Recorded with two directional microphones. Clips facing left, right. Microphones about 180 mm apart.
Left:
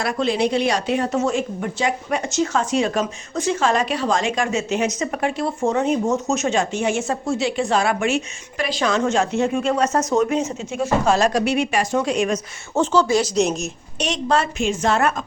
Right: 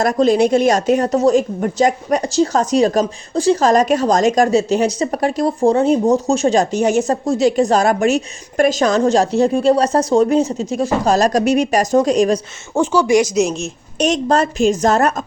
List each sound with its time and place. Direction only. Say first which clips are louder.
0.0 s a woman's voice: right 7 dB; 40° right (ahead or behind)
12.7 s speech: right 4 dB; 10° right (ahead or behind)
14.0 s a woman's voice: right 5 dB; 45° right (ahead or behind)